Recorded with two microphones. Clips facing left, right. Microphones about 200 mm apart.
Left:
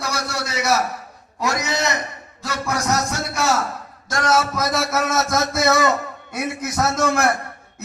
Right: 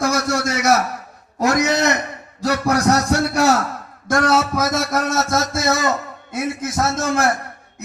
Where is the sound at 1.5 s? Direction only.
70° right (ahead or behind).